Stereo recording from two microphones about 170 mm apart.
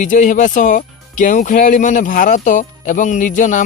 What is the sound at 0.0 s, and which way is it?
Speech, 50° left (ahead or behind).